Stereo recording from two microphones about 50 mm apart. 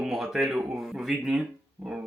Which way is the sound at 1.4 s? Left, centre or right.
Centre.